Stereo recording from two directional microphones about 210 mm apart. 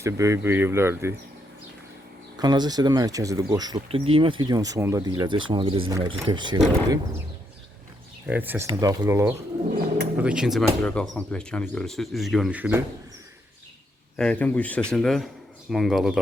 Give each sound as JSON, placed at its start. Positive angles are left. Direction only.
{"t": 0.0, "sound": "speech", "side_deg": -15}
{"t": 2.4, "sound": "speech", "side_deg": -20}
{"t": 8.3, "sound": "speech", "side_deg": -10}
{"t": 14.2, "sound": "speech", "side_deg": 5}